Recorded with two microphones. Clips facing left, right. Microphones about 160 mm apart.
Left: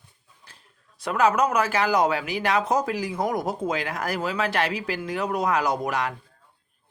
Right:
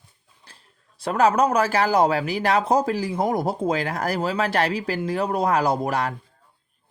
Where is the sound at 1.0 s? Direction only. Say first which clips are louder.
Right 2 dB; 30° right (ahead or behind).